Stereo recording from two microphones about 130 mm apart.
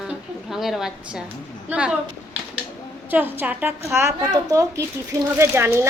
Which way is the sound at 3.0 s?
15° right (ahead or behind).